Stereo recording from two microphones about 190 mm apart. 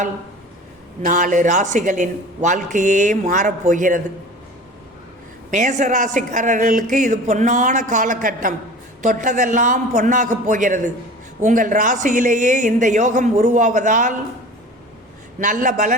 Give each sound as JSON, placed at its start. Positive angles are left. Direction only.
{"t": 1.0, "sound": "speech", "side_deg": -45}
{"t": 5.5, "sound": "speech", "side_deg": -40}
{"t": 15.4, "sound": "a woman's voice", "side_deg": -40}